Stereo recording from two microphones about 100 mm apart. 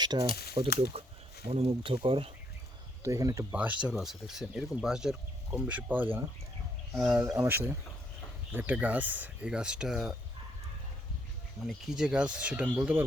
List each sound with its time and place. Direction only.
0.0 s speech: 45° right (ahead or behind); by 1.0 s 65° right (ahead or behind)
1.5 s speech: 80° right
3.0 s speech: 35° right (ahead or behind)
3.5 s speech: 15° right (ahead or behind)
3.8 s speech: 5° right (ahead or behind); by 6.2 s 20° right (ahead or behind)
7.3 s speech: 25° right (ahead or behind); by 10.2 s 5° right (ahead or behind)
11.6 s speech: 5° right (ahead or behind)